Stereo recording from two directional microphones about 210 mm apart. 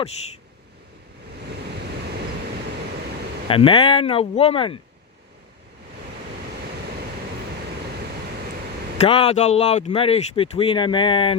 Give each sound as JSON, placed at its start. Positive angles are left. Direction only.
{"t": 3.5, "sound": "speech", "side_deg": 25}
{"t": 9.0, "sound": "speech", "side_deg": 30}